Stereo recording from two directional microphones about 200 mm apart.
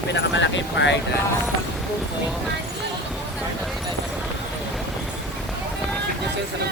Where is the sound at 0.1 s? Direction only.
65° left (ahead or behind).